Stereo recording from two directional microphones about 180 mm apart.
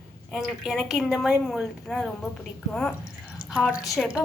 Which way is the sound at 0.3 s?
Centre (ahead or behind).